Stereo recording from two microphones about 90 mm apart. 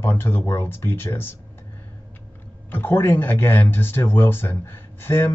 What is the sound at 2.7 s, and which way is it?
Speech, 25° left (ahead or behind).